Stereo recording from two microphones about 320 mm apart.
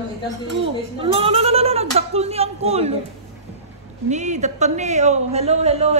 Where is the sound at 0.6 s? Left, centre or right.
Centre.